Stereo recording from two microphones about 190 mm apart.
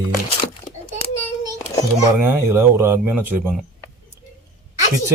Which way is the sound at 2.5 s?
15° right (ahead or behind).